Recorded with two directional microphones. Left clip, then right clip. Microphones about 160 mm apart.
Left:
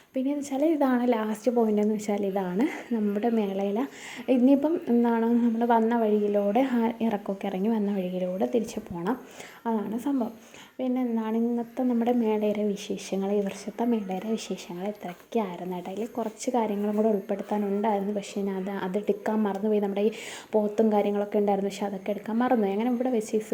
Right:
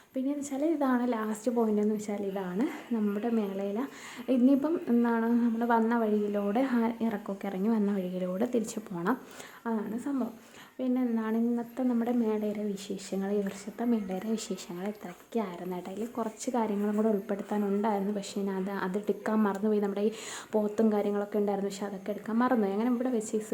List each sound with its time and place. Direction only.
0.3 s a woman's voice: 15° left (ahead or behind)
10.1 s speech: 20° left (ahead or behind)
10.8 s a woman's voice: 5° left (ahead or behind)